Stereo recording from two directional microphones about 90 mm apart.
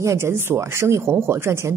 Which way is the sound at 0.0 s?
30° right (ahead or behind).